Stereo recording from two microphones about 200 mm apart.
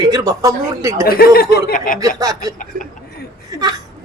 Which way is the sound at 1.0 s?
50° left (ahead or behind).